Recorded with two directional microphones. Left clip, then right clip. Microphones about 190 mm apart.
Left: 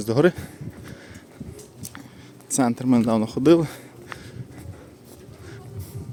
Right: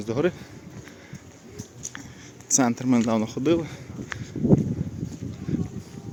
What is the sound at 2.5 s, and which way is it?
Speech, 10° left (ahead or behind).